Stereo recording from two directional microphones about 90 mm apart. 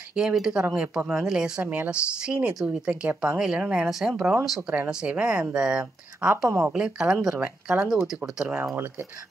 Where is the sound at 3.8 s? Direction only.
5° right (ahead or behind).